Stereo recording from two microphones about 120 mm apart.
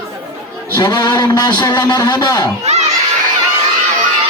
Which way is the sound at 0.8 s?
25° left (ahead or behind).